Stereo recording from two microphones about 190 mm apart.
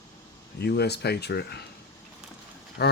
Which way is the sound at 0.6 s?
60° left (ahead or behind).